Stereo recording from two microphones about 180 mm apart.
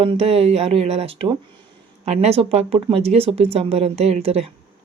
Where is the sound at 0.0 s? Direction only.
35° right (ahead or behind).